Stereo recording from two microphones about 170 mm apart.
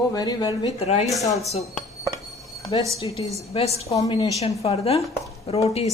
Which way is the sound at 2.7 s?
30° left (ahead or behind).